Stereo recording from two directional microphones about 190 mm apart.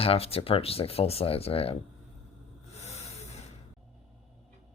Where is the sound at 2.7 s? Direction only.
35° left (ahead or behind).